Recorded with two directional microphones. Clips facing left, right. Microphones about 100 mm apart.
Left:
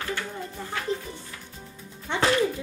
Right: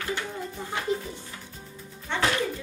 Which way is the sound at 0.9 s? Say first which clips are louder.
Right 2 dB; 15° right (ahead or behind).